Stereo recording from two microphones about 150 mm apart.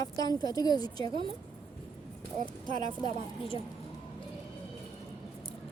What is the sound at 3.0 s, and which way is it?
Speech, 35° left (ahead or behind).